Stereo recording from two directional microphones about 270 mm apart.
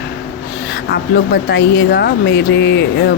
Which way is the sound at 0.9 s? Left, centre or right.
Left.